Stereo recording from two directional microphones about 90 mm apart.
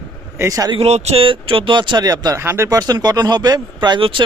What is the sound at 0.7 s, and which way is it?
Speech, 90° right.